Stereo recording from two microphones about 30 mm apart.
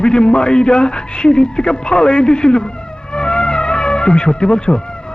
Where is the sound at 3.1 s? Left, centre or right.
Left.